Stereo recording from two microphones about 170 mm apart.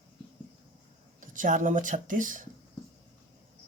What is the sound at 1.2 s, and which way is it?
Speech, 50° right (ahead or behind).